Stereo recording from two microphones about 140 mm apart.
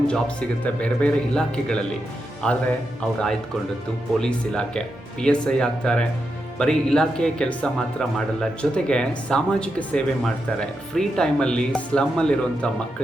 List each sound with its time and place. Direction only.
0.1 s speech: 10° left (ahead or behind)
4.2 s speech: 5° left (ahead or behind)